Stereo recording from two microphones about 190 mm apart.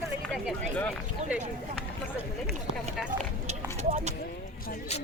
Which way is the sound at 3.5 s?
35° right (ahead or behind).